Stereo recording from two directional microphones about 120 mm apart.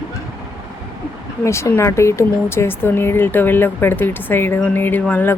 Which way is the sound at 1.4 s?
25° left (ahead or behind).